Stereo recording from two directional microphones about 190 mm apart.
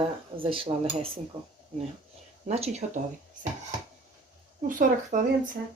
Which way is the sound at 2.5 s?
35° right (ahead or behind).